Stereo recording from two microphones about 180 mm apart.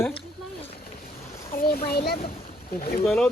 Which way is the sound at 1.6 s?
55° left (ahead or behind).